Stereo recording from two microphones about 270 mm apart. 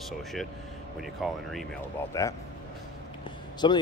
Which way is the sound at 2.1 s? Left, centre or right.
Centre.